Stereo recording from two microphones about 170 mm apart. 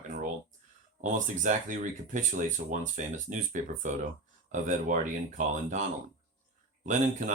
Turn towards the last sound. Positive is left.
turn(degrees=-50)  # may be behind; listen again after turning